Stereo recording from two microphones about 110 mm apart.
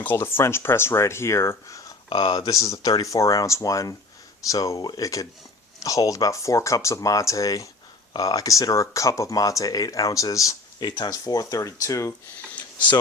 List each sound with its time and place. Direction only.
0.0 s speech: 20° left (ahead or behind)
2.0 s speech: 45° left (ahead or behind)
2.5 s speech: 30° left (ahead or behind)